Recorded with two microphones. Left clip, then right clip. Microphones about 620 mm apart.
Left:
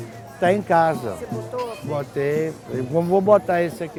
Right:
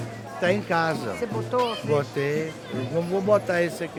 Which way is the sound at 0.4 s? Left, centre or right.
Left.